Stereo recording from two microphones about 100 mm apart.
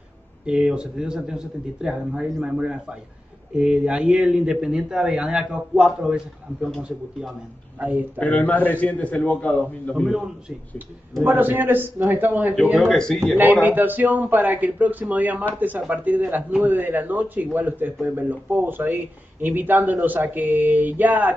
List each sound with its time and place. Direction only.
0.5 s a man's voice: 10° right (ahead or behind)
7.8 s a man's voice: 15° right (ahead or behind)
8.2 s a man's voice: 15° left (ahead or behind)
10.0 s a man's voice: 10° right (ahead or behind)
11.2 s a man's voice: 20° right (ahead or behind)
12.7 s speech: 5° left (ahead or behind)
13.4 s a man's voice: 20° right (ahead or behind)